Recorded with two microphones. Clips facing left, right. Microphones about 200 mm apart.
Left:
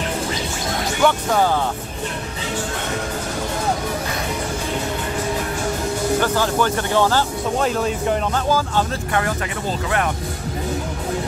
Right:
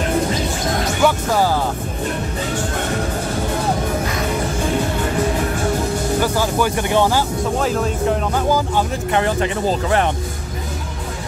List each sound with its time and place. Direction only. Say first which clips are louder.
1.0 s speech: even; 5° right (ahead or behind)
6.2 s speech: right 1 dB; 10° right (ahead or behind)
7.5 s speech: left 1 dB; centre (ahead or behind)
8.5 s speech: right 2 dB; 15° right (ahead or behind); by 10.0 s 30° right (ahead or behind)